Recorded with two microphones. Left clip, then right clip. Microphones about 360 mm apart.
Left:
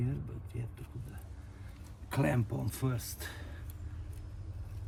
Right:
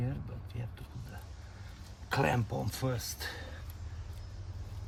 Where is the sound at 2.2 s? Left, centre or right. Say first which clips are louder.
Even; centre.